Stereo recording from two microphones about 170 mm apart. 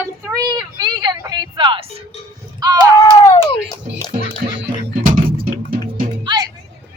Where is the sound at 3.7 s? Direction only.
25° left (ahead or behind).